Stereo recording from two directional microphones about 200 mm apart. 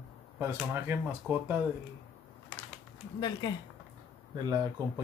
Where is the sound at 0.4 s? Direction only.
10° right (ahead or behind).